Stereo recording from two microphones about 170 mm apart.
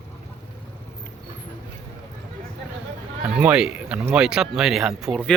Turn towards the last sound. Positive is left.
turn(degrees=5)  # may be behind; listen again after turning